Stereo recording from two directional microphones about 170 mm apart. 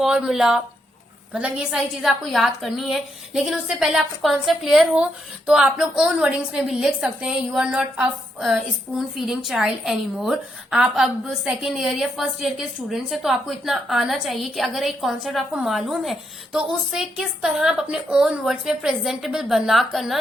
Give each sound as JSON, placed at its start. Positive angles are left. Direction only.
{"t": 0.0, "sound": "a woman's voice", "side_deg": 0}